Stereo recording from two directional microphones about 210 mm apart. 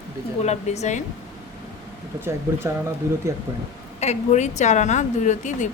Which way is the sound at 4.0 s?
35° left (ahead or behind).